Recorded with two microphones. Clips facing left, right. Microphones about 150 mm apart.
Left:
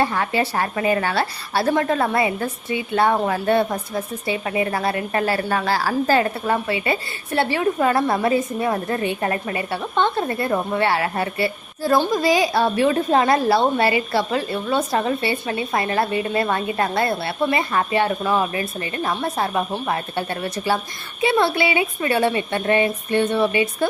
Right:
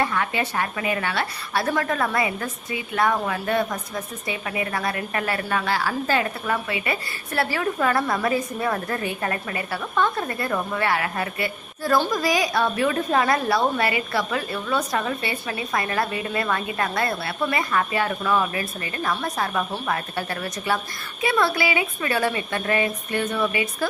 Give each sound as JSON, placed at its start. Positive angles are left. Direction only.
{"t": 0.0, "sound": "a woman's voice", "side_deg": 35}